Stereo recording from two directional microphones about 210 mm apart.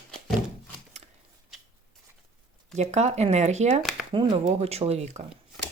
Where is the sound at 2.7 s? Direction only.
30° right (ahead or behind).